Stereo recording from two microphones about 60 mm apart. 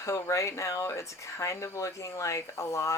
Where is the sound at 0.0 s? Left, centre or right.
Left.